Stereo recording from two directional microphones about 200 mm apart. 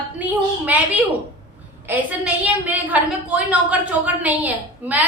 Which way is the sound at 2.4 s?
10° right (ahead or behind).